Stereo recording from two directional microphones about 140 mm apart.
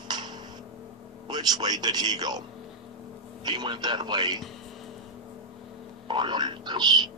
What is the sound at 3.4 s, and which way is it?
Speech, 30° right (ahead or behind).